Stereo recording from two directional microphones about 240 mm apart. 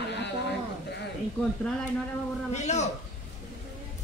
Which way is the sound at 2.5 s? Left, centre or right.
Left.